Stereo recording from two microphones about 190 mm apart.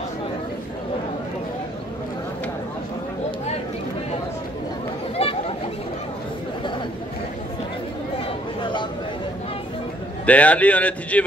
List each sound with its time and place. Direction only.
5.2 s chatter: 30° left (ahead or behind)
10.2 s speech: 5° left (ahead or behind)